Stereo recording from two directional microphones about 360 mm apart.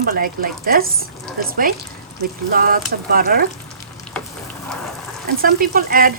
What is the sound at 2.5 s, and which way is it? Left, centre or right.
Speech, right.